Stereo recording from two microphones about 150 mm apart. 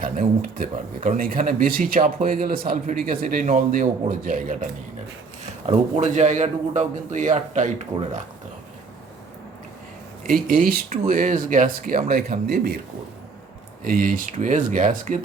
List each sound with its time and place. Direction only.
0.0 s speech: 65° right (ahead or behind)
5.7 s a man's voice: 50° right (ahead or behind)
10.2 s speech: 70° right (ahead or behind); by 12.8 s 90° right
13.8 s speech: 65° right (ahead or behind)